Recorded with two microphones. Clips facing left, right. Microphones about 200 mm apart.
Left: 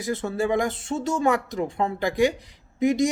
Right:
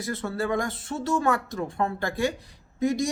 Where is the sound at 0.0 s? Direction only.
20° left (ahead or behind).